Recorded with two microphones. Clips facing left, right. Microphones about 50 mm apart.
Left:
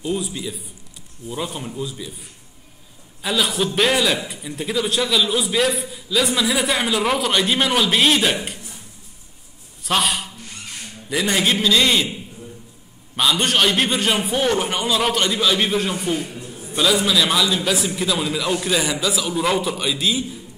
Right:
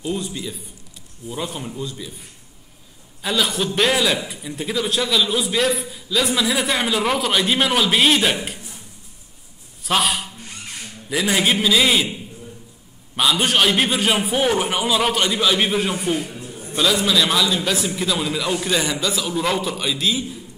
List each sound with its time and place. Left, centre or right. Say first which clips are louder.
0.0 s a man's voice: left 1 dB; centre
3.2 s a man's voice: even; centre
9.8 s a man's voice: even; centre
16.3 s a sound: even; centre
16.6 s a man's voice: left 1 dB; centre